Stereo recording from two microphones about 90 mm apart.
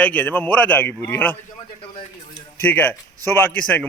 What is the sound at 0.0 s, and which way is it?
A man's voice, 20° left (ahead or behind).